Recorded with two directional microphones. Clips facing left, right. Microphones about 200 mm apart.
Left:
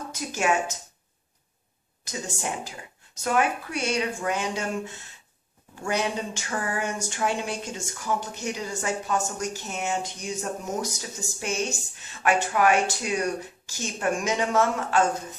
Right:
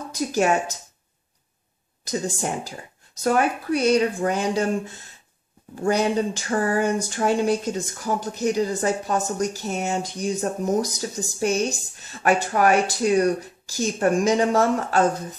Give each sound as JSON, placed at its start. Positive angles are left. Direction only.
{"t": 0.1, "sound": "speech", "side_deg": -35}
{"t": 2.0, "sound": "speech", "side_deg": -35}